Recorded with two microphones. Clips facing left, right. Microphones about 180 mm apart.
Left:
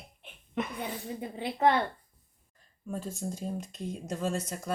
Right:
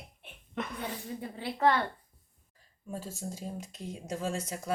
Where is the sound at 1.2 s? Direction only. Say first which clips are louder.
Left 2 dB; 20° left (ahead or behind).